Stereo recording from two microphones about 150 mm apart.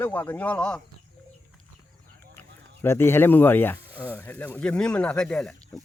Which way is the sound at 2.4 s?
15° left (ahead or behind).